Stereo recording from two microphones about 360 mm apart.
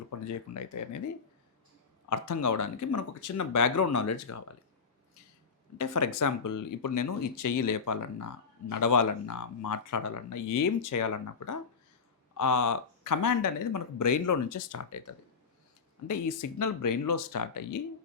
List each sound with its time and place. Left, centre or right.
0.3 s speech: left
2.0 s speech: left
5.7 s speech: left